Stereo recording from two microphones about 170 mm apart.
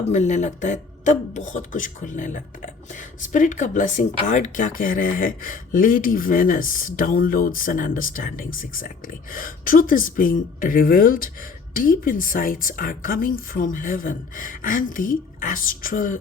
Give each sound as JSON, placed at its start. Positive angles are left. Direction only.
{"t": 0.1, "sound": "speech", "side_deg": 45}